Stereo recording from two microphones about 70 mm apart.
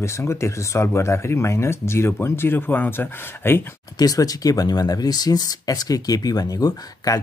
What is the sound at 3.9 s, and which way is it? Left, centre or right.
Speech, left.